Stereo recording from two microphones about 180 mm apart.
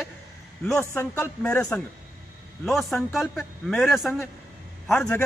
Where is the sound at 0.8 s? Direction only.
10° left (ahead or behind).